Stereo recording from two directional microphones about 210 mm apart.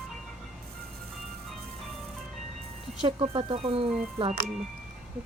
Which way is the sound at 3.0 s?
25° right (ahead or behind).